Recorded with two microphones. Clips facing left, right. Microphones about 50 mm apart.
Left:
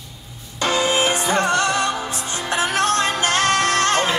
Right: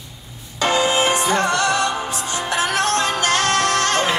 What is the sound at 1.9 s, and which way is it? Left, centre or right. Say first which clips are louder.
Music: right 2 dB; right.